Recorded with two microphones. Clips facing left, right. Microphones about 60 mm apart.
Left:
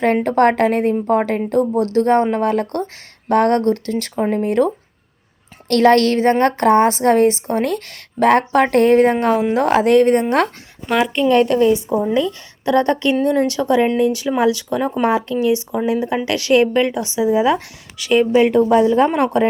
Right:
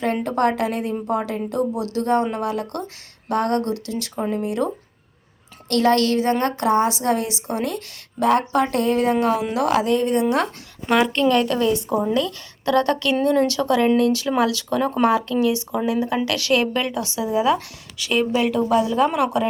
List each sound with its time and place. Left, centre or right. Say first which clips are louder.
0.0 s a woman's voice: left 6 dB; left
9.8 s a woman's voice: left 6 dB; left
10.8 s a woman's voice: left 1 dB; centre
11.3 s speech: left 5 dB; left
18.9 s speech: left 4 dB; left